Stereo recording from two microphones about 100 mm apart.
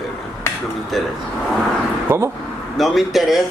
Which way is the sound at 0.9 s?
Centre (ahead or behind).